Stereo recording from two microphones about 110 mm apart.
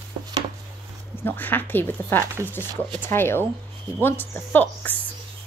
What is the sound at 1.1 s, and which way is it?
A woman's voice, 20° left (ahead or behind).